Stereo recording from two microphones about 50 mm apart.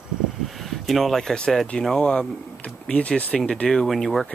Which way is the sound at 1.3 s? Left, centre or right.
Centre.